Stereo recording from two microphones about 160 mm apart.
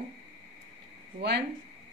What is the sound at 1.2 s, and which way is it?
Speech, 90° right.